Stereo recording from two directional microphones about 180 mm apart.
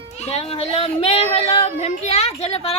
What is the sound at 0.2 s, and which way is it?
Speech, 35° left (ahead or behind).